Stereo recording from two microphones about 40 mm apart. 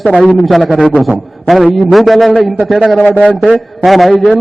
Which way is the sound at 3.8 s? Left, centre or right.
Centre.